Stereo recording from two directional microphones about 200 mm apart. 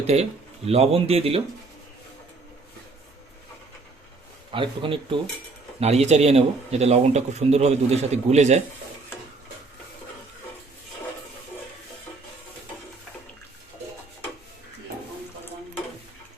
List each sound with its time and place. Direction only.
0.0 s speech: 30° right (ahead or behind)
4.5 s a man's voice: 25° right (ahead or behind)